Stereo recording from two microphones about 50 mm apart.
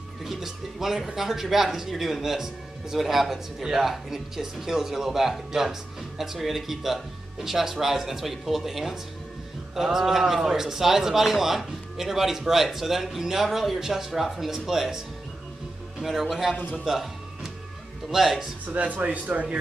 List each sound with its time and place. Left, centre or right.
0.2 s a man's voice: centre
16.7 s music: centre
18.1 s a man's voice: centre
19.0 s speech: right